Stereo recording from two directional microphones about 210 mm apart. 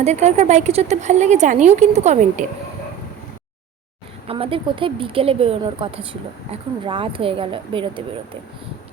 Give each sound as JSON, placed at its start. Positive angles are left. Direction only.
{"t": 0.0, "sound": "speech", "side_deg": -30}
{"t": 4.3, "sound": "speech", "side_deg": -25}